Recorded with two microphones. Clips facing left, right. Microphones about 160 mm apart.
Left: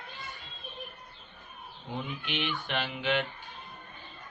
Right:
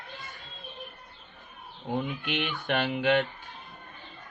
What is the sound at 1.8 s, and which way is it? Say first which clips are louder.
A man's voice: right 6 dB; 50° right (ahead or behind).